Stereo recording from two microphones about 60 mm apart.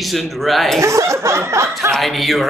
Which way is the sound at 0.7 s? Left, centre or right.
Right.